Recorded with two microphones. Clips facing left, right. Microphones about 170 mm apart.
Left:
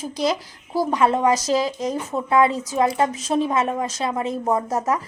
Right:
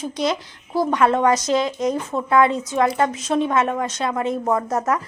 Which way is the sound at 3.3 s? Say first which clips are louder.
Right 2 dB; 20° left (ahead or behind).